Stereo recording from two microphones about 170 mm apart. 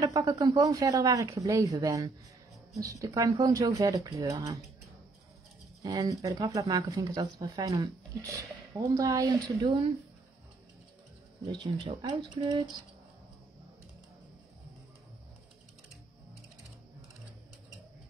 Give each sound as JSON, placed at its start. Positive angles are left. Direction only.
{"t": 0.0, "sound": "speech", "side_deg": -20}
{"t": 5.8, "sound": "speech", "side_deg": -25}
{"t": 11.4, "sound": "speech", "side_deg": -25}